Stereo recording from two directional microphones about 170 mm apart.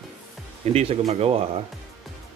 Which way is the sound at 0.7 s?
40° right (ahead or behind).